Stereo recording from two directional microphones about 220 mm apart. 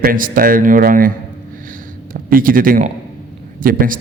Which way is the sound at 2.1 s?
40° right (ahead or behind).